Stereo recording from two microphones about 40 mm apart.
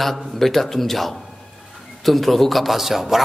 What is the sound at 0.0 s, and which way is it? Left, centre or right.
A man's voice, centre.